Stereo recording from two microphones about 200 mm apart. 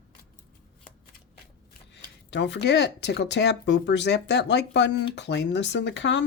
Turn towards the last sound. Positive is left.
turn(degrees=65)  # may be behind; listen again after turning